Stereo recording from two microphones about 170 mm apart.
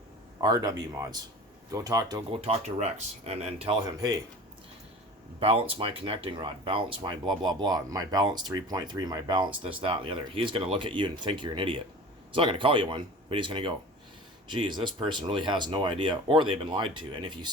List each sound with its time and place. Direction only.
0.4 s speech: 25° right (ahead or behind)
2.3 s speech: 35° right (ahead or behind)
3.8 s speech: 25° right (ahead or behind)
5.4 s speech: 35° right (ahead or behind)